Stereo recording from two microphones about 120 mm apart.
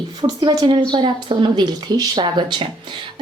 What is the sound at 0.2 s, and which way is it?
A woman's voice, 35° right (ahead or behind).